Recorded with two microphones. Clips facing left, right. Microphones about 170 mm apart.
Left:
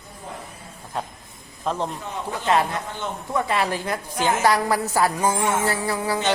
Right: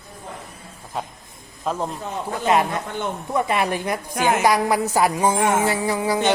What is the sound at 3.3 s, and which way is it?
Speech, 15° right (ahead or behind).